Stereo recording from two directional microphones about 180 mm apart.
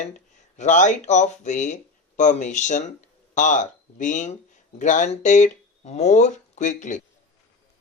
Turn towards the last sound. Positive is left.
turn(degrees=45)  # may be behind; listen again after turning